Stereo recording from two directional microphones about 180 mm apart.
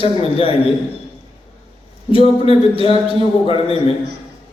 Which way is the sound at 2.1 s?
30° left (ahead or behind).